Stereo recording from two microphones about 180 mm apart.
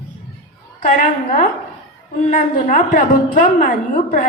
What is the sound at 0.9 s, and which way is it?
A woman's voice, 45° left (ahead or behind).